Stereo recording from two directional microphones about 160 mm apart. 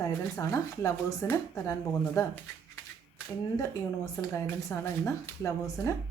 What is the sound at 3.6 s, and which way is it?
Speech, 20° left (ahead or behind).